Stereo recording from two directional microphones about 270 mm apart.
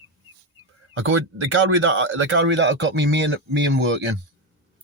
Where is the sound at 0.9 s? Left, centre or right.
Right.